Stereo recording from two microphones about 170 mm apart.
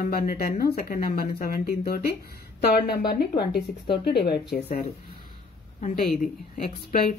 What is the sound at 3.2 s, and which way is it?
Speech, 70° left (ahead or behind).